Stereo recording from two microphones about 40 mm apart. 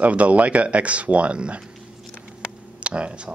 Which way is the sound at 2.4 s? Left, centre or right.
Right.